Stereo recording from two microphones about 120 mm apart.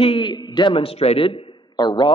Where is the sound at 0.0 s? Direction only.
45° left (ahead or behind).